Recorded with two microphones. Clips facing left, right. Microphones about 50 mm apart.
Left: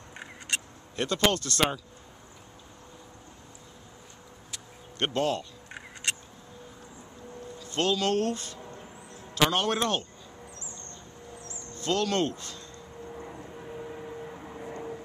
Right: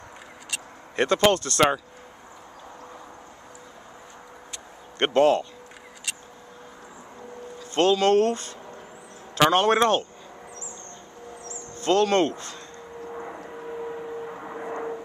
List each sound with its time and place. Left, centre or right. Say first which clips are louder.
0.9 s speech: right 6 dB; right
4.9 s speech: right 9 dB; right
6.1 s a sound: left 3 dB; left
7.7 s speech: right 7 dB; right
11.6 s a sound: right 7 dB; right
13.6 s vehicle: right 7 dB; right
14.4 s vehicle: right 7 dB; right